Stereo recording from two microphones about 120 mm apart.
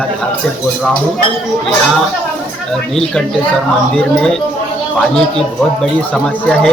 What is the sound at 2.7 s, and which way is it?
A man's voice, 5° left (ahead or behind).